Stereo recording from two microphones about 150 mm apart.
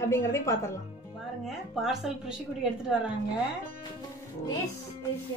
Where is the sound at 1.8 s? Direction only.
5° right (ahead or behind).